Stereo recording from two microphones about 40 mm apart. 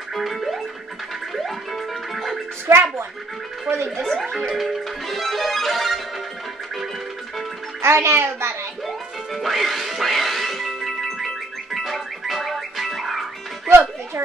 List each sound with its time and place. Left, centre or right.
0.1 s music: centre
2.7 s speech: right
4.1 s music: centre
7.8 s a child's voice: right
8.8 s music: centre
13.7 s music: right